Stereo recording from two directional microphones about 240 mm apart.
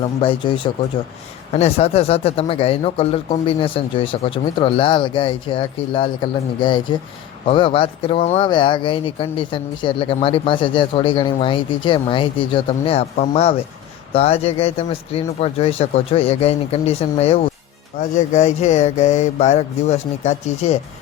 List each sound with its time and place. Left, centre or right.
0.2 s speech: left